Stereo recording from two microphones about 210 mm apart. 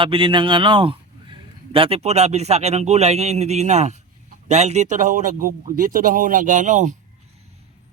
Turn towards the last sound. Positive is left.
turn(degrees=-35)  # may be behind; listen again after turning